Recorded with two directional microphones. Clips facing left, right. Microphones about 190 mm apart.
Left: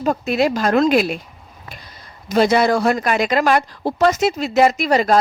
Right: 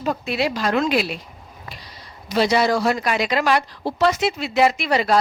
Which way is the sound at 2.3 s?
50° left (ahead or behind).